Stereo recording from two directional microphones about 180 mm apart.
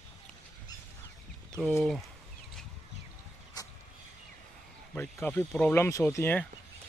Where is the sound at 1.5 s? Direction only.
5° right (ahead or behind).